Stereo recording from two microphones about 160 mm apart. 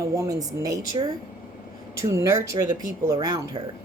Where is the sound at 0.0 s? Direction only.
20° right (ahead or behind).